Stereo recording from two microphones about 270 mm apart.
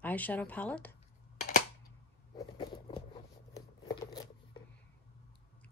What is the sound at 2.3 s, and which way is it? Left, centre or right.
Zipper, centre.